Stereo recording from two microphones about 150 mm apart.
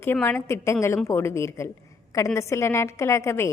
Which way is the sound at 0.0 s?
15° left (ahead or behind).